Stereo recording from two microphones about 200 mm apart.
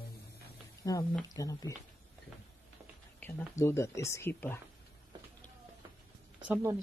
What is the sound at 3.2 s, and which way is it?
Speech, 15° left (ahead or behind).